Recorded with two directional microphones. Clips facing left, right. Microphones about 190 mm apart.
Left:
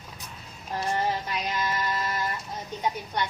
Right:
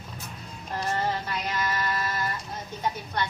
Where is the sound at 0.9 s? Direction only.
15° left (ahead or behind).